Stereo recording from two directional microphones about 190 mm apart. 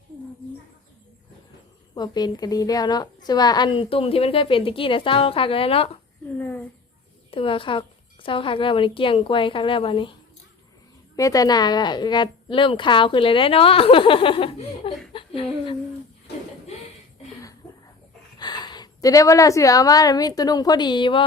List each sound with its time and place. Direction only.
2.0 s a woman's voice: 20° left (ahead or behind)
7.3 s a woman's voice: 30° left (ahead or behind)
11.2 s a woman's voice: 20° left (ahead or behind)
18.3 s a woman's voice: 20° left (ahead or behind)